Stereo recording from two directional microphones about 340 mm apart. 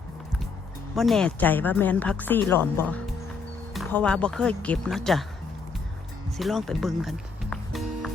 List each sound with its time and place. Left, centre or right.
0.9 s speech: centre
6.3 s music: centre